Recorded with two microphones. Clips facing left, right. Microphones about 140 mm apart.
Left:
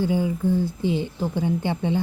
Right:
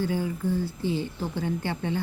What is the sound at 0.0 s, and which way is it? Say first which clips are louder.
A woman's voice: left 5 dB; 15° left (ahead or behind).